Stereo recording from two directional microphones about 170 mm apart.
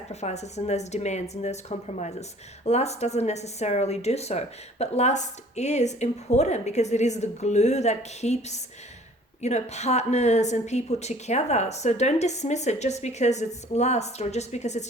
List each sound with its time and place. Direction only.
0.1 s a woman's voice: 40° left (ahead or behind)